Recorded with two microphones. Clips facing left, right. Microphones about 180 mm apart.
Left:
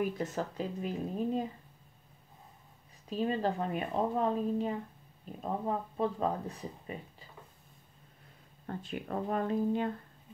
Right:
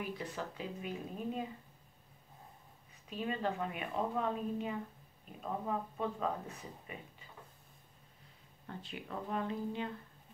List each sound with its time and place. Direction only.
0.0 s speech: 45° left (ahead or behind)
3.1 s a woman's voice: 35° left (ahead or behind)
8.6 s speech: 50° left (ahead or behind)